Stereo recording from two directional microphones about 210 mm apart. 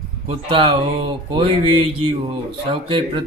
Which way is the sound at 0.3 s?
25° right (ahead or behind).